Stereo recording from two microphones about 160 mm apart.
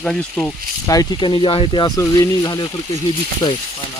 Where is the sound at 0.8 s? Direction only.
20° left (ahead or behind).